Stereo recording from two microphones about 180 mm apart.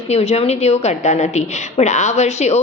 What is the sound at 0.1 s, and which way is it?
A woman's voice, 35° left (ahead or behind).